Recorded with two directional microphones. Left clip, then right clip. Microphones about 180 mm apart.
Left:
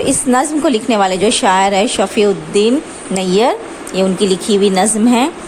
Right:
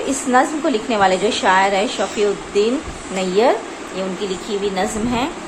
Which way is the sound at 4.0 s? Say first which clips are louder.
Left 10 dB; 60° left (ahead or behind).